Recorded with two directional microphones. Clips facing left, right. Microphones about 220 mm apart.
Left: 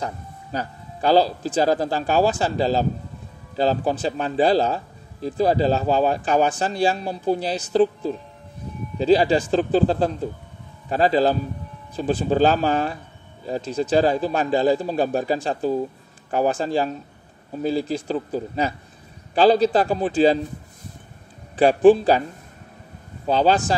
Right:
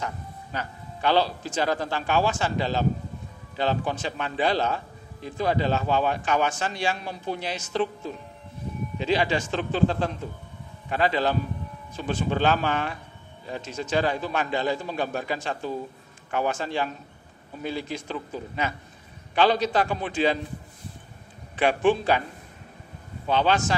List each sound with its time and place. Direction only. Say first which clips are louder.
0.0 s speech: left 3 dB; 35° left (ahead or behind)
21.5 s speech: left 8 dB; 35° left (ahead or behind)
23.2 s speech: left 4 dB; 35° left (ahead or behind)